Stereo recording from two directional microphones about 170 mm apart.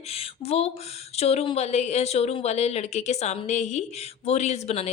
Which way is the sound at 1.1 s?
40° left (ahead or behind).